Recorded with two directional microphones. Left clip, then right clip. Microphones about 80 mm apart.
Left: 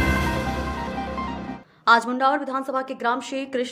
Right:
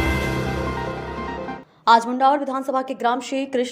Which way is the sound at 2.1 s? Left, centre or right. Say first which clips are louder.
Right 3 dB; right.